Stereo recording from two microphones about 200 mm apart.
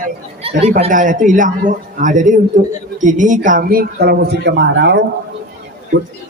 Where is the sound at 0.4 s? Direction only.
30° right (ahead or behind); by 5.0 s 60° right (ahead or behind).